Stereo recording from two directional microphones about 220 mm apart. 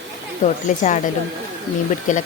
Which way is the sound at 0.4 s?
35° left (ahead or behind).